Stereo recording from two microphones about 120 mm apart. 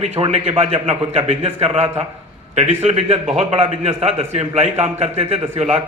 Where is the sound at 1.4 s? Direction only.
50° right (ahead or behind).